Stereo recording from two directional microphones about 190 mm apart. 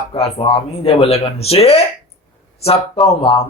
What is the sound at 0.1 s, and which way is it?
Speech, 30° left (ahead or behind).